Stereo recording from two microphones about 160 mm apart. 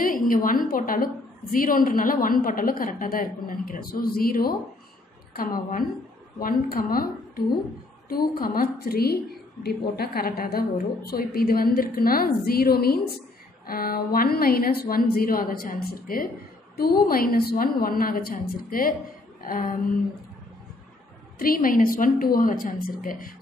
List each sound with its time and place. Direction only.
0.0 s a woman's voice: 60° left (ahead or behind)
21.4 s a woman's voice: 60° left (ahead or behind)